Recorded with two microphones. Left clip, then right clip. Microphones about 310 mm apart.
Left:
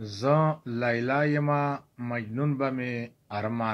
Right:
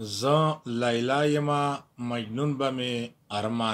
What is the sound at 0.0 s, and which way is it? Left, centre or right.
Speech, right.